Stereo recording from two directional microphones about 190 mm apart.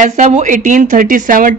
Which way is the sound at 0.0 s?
35° right (ahead or behind).